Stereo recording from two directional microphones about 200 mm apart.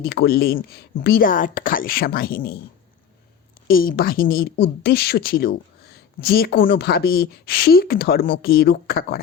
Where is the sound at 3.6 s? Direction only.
45° left (ahead or behind).